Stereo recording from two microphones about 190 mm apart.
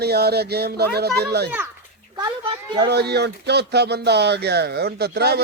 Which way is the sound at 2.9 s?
60° right (ahead or behind).